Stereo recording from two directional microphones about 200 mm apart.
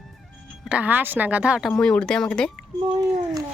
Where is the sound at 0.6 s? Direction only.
5° right (ahead or behind).